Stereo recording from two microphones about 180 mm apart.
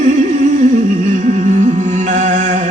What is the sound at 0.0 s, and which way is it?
Humming, 45° right (ahead or behind).